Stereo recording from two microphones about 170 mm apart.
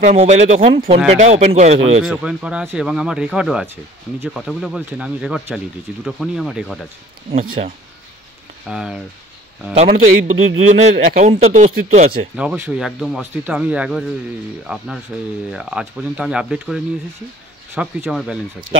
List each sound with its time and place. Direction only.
0.0 s speech: 40° right (ahead or behind)
2.0 s speech: 5° right (ahead or behind)
7.2 s speech: 35° right (ahead or behind)
8.6 s speech: 5° right (ahead or behind)
9.8 s a man's voice: 40° right (ahead or behind)
12.4 s speech: 5° right (ahead or behind)